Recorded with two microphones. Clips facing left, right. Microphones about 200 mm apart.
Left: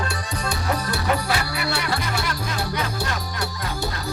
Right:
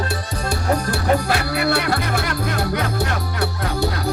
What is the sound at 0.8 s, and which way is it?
Music, 50° right (ahead or behind).